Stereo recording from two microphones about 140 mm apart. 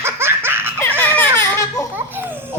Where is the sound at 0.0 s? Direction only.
15° right (ahead or behind).